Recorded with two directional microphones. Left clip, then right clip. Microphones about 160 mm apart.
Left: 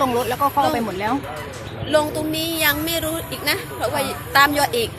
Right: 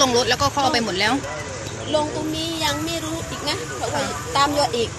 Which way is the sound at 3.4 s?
20° left (ahead or behind).